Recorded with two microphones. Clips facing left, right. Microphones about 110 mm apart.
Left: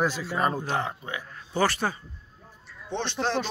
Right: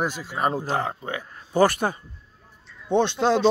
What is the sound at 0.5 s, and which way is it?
Speech, 35° right (ahead or behind).